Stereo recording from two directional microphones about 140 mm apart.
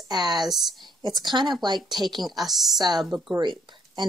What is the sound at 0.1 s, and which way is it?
Speech, 30° right (ahead or behind).